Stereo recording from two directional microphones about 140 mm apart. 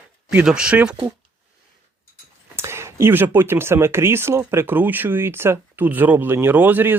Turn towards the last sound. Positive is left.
turn(degrees=-15)  # may be behind; listen again after turning